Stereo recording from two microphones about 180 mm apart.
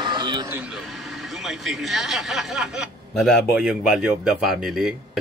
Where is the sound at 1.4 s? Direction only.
Centre (ahead or behind).